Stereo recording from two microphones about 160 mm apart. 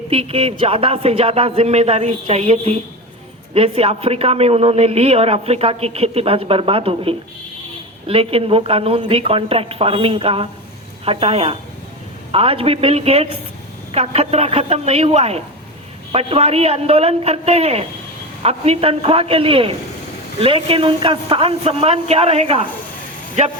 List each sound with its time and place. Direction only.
0.1 s a man's voice: 35° right (ahead or behind)